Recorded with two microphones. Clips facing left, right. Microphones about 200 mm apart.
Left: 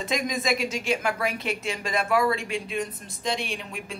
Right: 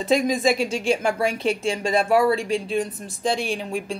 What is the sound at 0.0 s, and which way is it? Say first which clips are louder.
A woman's voice: right 8 dB; 30° right (ahead or behind).